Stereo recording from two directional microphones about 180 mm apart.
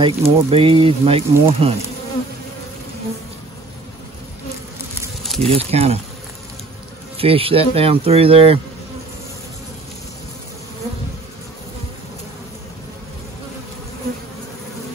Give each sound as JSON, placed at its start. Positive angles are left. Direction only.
{"t": 0.0, "sound": "speech", "side_deg": -30}
{"t": 5.2, "sound": "a sound", "side_deg": 0}
{"t": 5.5, "sound": "speech", "side_deg": -35}
{"t": 7.2, "sound": "speech", "side_deg": -30}